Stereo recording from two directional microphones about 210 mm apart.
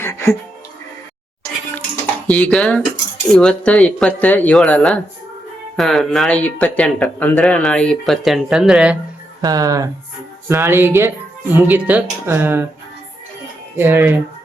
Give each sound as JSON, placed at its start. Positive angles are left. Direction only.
{"t": 0.0, "sound": "music", "side_deg": 15}
{"t": 2.2, "sound": "speech", "side_deg": 5}
{"t": 9.4, "sound": "speech", "side_deg": -15}
{"t": 13.7, "sound": "speech", "side_deg": -10}